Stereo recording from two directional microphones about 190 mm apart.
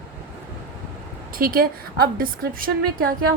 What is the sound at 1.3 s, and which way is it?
A woman's voice, 50° right (ahead or behind).